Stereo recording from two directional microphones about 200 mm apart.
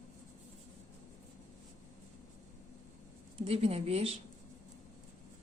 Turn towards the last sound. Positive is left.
turn(degrees=-30)  # may be behind; listen again after turning